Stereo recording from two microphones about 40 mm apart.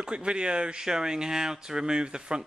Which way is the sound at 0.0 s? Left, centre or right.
Right.